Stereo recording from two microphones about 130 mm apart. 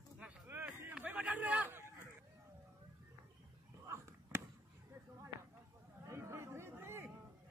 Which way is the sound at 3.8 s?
25° right (ahead or behind).